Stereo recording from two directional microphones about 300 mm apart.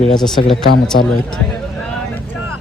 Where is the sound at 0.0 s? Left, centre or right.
Centre.